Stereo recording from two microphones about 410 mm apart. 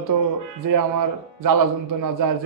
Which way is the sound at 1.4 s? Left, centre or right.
Right.